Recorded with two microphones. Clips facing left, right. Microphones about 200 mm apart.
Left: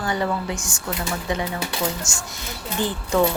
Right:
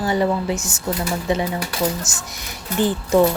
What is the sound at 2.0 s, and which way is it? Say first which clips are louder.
Speech: right 1 dB; 20° right (ahead or behind).